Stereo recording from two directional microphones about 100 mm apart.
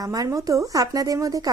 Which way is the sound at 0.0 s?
35° right (ahead or behind).